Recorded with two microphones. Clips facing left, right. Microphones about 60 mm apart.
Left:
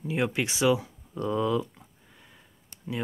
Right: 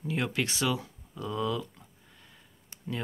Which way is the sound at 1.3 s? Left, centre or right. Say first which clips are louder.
Left 5 dB; left.